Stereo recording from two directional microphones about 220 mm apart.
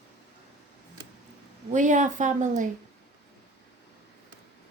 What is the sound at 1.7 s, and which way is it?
A woman's voice, 35° right (ahead or behind).